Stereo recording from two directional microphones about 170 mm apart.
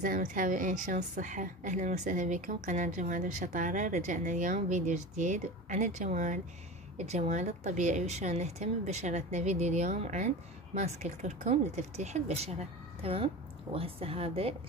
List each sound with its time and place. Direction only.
0.0 s a woman's voice: 50° right (ahead or behind); by 14.5 s 35° right (ahead or behind)